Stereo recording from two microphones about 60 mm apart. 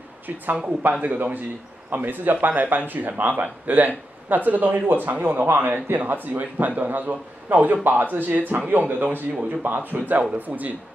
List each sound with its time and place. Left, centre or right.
1.0 s speech: right